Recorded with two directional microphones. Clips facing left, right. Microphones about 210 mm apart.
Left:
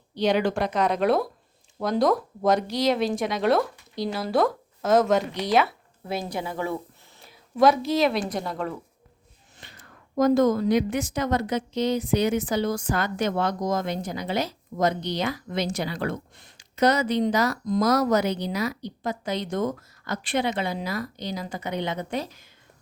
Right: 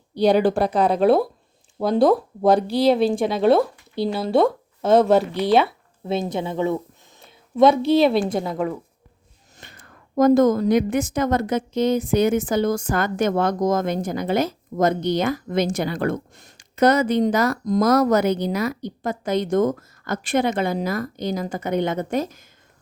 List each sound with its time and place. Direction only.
0.2 s speech: 35° right (ahead or behind)
7.3 s a sound: 25° right (ahead or behind)
8.4 s a woman's voice: 10° right (ahead or behind)
9.6 s a woman's voice: 50° right (ahead or behind)